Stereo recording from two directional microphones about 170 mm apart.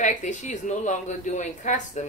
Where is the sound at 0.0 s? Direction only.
45° left (ahead or behind).